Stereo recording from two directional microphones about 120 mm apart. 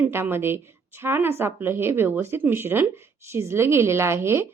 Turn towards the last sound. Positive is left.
turn(degrees=-20)  # may be behind; listen again after turning